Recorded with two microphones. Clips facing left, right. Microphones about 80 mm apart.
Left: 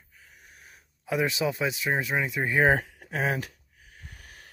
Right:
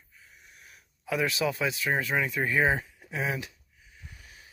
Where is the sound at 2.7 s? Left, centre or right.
Left.